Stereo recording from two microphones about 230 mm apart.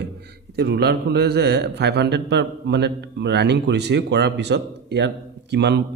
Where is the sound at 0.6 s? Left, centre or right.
Right.